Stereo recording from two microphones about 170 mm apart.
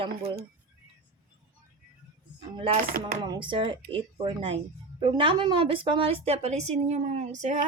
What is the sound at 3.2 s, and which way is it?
A woman's voice, 25° right (ahead or behind).